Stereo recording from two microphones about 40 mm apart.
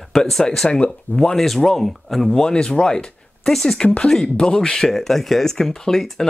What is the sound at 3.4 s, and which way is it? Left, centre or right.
Speech, centre.